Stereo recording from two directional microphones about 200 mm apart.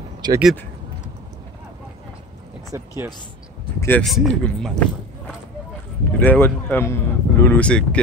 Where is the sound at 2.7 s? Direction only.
10° right (ahead or behind).